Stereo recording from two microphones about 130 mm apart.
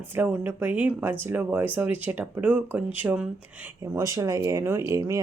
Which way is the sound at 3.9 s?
25° right (ahead or behind).